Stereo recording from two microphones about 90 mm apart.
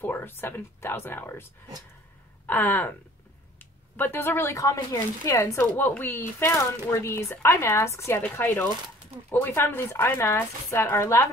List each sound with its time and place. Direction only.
0.0 s speech: 20° left (ahead or behind)
2.4 s speech: 20° left (ahead or behind)
3.5 s a sound: 20° left (ahead or behind)
4.6 s speech: 40° left (ahead or behind)
5.6 s speech: 25° left (ahead or behind)